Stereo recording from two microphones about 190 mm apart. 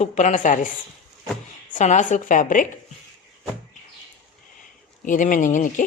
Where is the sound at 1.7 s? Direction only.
40° left (ahead or behind).